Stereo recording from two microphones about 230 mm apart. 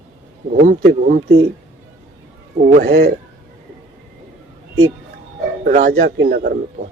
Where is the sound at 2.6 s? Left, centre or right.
Right.